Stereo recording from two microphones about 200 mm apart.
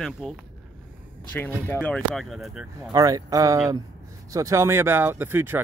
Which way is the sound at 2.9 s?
15° right (ahead or behind).